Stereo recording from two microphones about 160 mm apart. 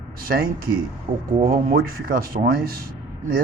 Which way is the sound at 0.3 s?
65° right (ahead or behind).